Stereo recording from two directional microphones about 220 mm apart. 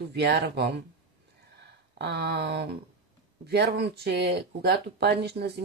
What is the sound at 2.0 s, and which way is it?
Speech, 50° right (ahead or behind).